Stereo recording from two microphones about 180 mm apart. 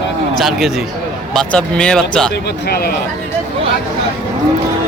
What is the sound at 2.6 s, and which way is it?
Speech, 60° left (ahead or behind).